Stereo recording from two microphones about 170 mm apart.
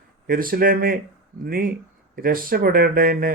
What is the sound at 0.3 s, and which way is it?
Speech, 60° right (ahead or behind).